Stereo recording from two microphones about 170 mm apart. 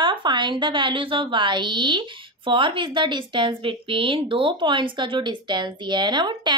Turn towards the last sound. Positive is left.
turn(degrees=-25)  # may be behind; listen again after turning